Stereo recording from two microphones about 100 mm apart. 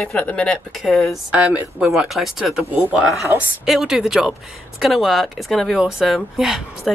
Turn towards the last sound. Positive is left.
turn(degrees=0)  # may be behind; listen again after turning